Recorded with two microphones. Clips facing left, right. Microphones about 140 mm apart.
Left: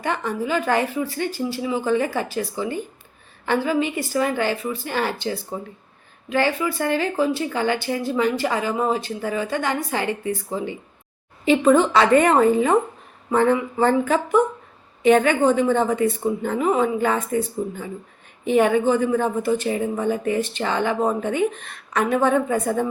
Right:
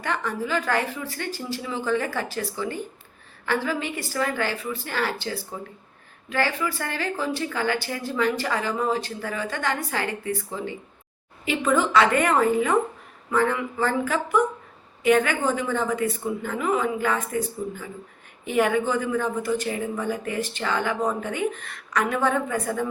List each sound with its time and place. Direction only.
0.0 s a woman's voice: 15° left (ahead or behind)
11.4 s a woman's voice: 30° left (ahead or behind)